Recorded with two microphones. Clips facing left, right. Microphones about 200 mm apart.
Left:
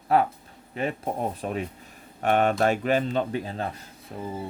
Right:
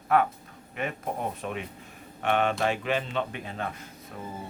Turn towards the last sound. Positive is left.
turn(degrees=30)  # may be behind; listen again after turning